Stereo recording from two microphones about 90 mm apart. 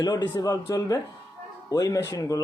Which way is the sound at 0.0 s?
45° left (ahead or behind).